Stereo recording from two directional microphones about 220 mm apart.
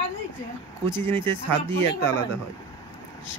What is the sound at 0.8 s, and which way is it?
Speech, 10° left (ahead or behind).